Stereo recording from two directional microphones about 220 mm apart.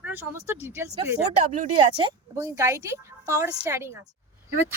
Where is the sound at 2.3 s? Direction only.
15° right (ahead or behind).